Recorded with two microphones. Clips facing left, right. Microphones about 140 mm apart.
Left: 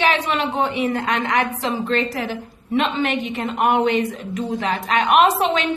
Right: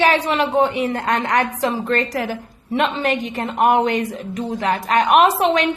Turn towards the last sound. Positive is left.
turn(degrees=-35)  # may be behind; listen again after turning